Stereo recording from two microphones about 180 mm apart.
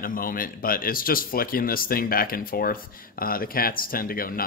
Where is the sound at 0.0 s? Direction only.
50° left (ahead or behind).